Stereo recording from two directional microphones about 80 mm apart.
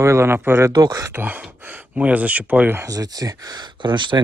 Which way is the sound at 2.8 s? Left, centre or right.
Right.